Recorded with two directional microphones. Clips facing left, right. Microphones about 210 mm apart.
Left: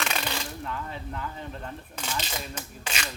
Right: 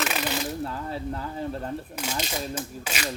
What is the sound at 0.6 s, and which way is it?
Speech, 35° right (ahead or behind).